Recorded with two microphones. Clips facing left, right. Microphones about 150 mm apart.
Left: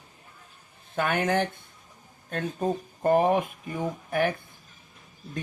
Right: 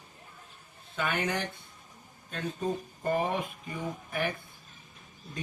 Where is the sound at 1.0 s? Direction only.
45° left (ahead or behind).